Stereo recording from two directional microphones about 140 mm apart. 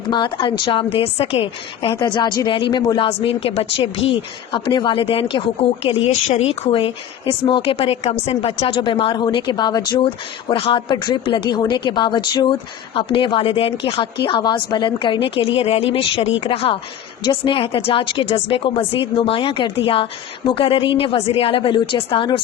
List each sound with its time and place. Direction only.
0.1 s speech: 35° left (ahead or behind)